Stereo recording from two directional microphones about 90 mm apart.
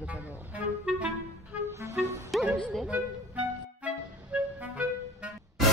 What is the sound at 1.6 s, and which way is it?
Music, 25° right (ahead or behind).